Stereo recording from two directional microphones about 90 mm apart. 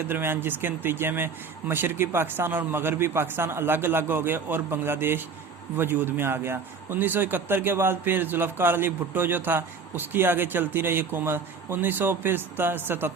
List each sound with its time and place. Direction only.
0.1 s a man's voice: 25° right (ahead or behind)